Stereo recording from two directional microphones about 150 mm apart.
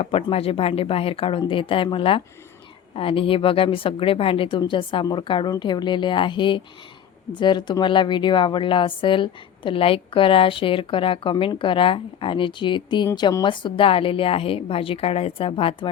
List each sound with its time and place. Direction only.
0.0 s speech: 40° left (ahead or behind)